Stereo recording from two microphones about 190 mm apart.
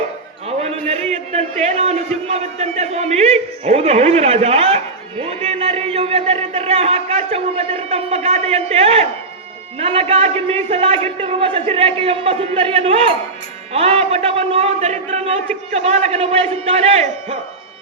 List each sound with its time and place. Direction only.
1.1 s a sound: 35° right (ahead or behind)
2.2 s music: 35° right (ahead or behind)
9.7 s a man's voice: 30° right (ahead or behind)